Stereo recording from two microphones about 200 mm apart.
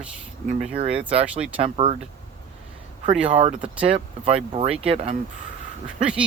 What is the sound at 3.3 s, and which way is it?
Speech, 30° right (ahead or behind).